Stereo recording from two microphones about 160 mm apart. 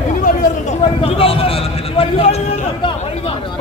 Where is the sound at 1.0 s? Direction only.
35° left (ahead or behind).